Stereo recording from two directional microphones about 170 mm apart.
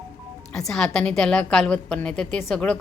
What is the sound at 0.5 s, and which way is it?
A woman's voice, centre (ahead or behind).